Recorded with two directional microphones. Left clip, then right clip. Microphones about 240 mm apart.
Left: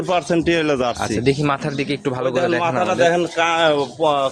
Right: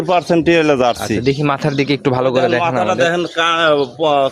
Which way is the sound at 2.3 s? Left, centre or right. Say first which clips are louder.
Right 4 dB; right.